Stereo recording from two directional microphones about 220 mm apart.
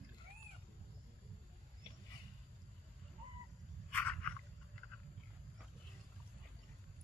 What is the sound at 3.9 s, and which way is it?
Wild animals, 5° left (ahead or behind).